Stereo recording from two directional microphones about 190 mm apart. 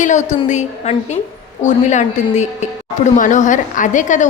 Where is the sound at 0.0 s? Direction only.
40° left (ahead or behind).